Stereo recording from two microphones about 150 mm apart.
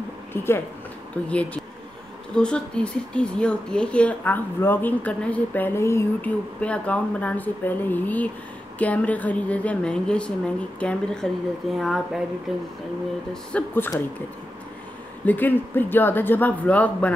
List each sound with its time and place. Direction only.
0.3 s speech: 15° left (ahead or behind)
15.2 s speech: 10° left (ahead or behind)